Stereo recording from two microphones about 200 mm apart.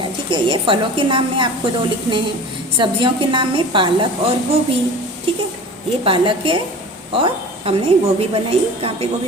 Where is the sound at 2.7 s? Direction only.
25° right (ahead or behind).